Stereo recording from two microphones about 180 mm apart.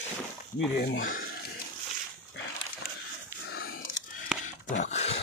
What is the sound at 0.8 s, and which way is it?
Speech, 50° left (ahead or behind).